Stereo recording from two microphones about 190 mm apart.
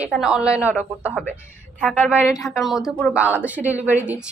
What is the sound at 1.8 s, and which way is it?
Speech, 5° left (ahead or behind).